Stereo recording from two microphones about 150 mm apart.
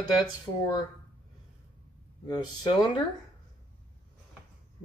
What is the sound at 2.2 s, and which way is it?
Speech, 30° left (ahead or behind).